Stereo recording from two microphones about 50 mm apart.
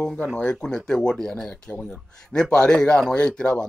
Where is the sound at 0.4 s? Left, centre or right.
Centre.